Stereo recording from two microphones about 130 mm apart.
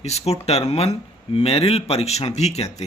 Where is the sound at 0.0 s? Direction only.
55° left (ahead or behind).